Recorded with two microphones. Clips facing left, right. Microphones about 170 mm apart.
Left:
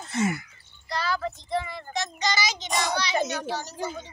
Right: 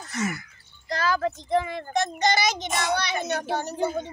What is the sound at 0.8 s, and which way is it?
A child's voice, 45° right (ahead or behind).